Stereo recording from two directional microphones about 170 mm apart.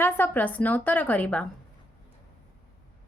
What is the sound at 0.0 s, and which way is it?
A woman's voice, 10° left (ahead or behind).